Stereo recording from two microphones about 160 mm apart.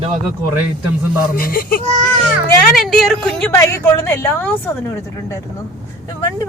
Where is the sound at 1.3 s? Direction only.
65° left (ahead or behind).